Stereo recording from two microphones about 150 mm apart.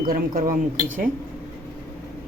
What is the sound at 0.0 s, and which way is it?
Speech, 70° right (ahead or behind).